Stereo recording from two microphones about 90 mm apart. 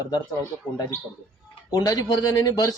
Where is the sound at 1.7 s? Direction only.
45° left (ahead or behind).